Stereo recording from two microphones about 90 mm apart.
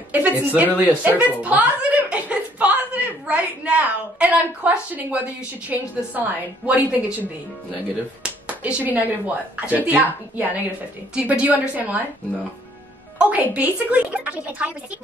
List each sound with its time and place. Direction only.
0.1 s speech: 15° right (ahead or behind)
13.2 s speech: 15° right (ahead or behind)